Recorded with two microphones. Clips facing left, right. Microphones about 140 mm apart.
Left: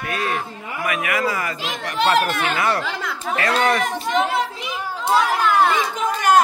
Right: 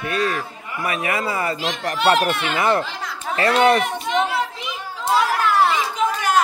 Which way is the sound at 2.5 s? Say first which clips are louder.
Right 2 dB; 20° right (ahead or behind).